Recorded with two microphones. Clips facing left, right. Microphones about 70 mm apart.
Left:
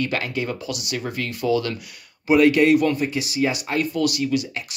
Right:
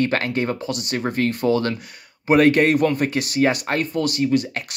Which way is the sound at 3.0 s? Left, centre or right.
Right.